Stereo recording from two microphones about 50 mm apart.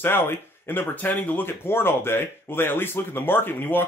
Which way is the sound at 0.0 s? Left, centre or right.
Left.